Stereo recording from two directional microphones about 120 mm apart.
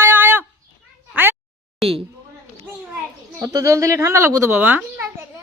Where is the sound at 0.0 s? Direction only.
20° right (ahead or behind).